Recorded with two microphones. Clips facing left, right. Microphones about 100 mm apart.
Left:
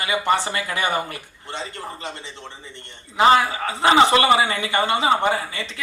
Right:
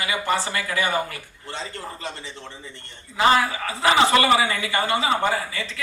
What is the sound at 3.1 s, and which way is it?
A man's voice, 20° left (ahead or behind).